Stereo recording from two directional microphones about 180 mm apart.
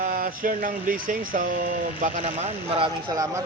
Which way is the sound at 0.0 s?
50° right (ahead or behind).